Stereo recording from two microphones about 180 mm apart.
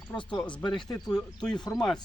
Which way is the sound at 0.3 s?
5° left (ahead or behind).